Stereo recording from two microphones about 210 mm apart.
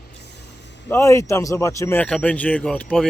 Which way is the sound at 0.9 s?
15° left (ahead or behind).